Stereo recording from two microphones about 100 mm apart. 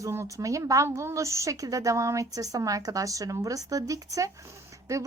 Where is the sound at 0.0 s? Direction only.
30° right (ahead or behind).